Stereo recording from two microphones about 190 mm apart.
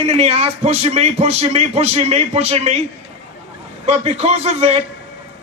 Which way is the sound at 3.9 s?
35° right (ahead or behind).